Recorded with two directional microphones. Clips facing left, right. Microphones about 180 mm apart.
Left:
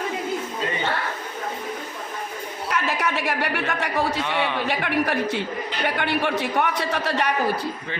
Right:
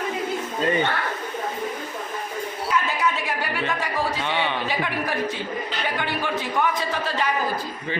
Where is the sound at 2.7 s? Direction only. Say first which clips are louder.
Even; 70° left (ahead or behind).